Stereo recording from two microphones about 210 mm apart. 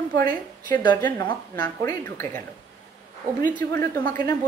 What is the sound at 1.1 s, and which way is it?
A woman's voice, 15° left (ahead or behind).